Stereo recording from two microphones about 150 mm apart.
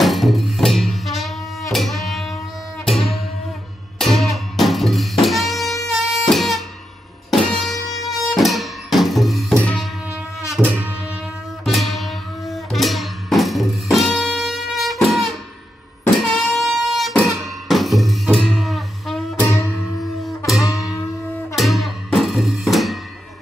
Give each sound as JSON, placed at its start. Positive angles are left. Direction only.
{"t": 0.0, "sound": "music", "side_deg": 0}
{"t": 10.5, "sound": "music", "side_deg": -10}
{"t": 11.6, "sound": "music", "side_deg": 0}
{"t": 16.2, "sound": "a sound", "side_deg": 0}
{"t": 17.6, "sound": "music", "side_deg": 0}
{"t": 19.4, "sound": "music", "side_deg": 15}
{"t": 20.2, "sound": "music", "side_deg": 0}
{"t": 20.6, "sound": "music", "side_deg": 20}
{"t": 21.5, "sound": "music", "side_deg": 0}